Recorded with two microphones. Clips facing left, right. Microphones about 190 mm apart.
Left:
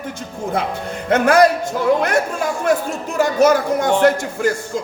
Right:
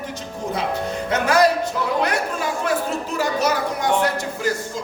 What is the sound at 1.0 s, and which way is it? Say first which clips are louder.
Speech: left 5 dB; 55° left (ahead or behind).